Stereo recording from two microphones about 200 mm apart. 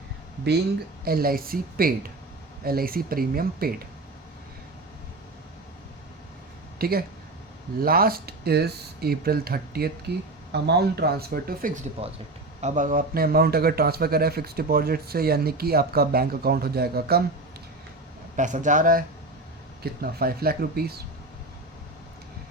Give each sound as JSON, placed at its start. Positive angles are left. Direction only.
{"t": 1.0, "sound": "a man's voice", "side_deg": -50}
{"t": 6.7, "sound": "a man's voice", "side_deg": -50}
{"t": 18.3, "sound": "a man's voice", "side_deg": -40}